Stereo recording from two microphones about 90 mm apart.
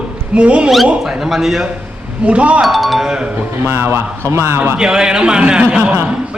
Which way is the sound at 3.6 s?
25° right (ahead or behind).